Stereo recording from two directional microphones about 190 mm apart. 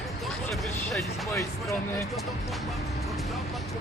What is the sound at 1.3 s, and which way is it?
Speech, 15° left (ahead or behind).